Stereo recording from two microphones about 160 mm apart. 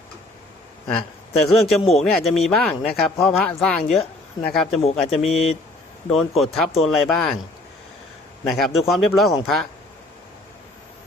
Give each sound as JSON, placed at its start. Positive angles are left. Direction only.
{"t": 1.6, "sound": "speech", "side_deg": 40}
{"t": 2.1, "sound": "speech", "side_deg": 5}
{"t": 4.8, "sound": "speech", "side_deg": 40}
{"t": 5.1, "sound": "speech", "side_deg": 0}
{"t": 8.4, "sound": "speech", "side_deg": 0}